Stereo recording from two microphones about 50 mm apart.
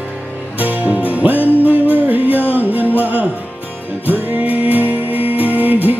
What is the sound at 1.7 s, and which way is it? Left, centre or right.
Music, left.